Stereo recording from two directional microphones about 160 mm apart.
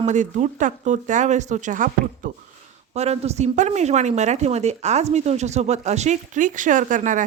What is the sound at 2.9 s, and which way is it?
Speech, 40° right (ahead or behind).